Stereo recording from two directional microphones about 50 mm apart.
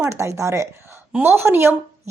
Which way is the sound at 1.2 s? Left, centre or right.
Right.